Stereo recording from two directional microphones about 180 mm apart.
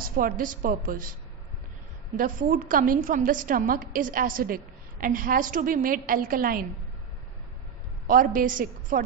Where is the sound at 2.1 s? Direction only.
50° right (ahead or behind).